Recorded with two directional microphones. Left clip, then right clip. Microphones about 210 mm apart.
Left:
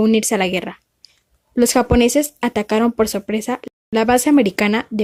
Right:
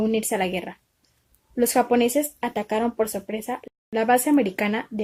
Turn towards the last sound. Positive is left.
turn(degrees=40)  # may be behind; listen again after turning